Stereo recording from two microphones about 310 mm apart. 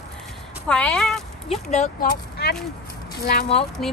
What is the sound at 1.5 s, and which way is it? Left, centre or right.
Speech, left.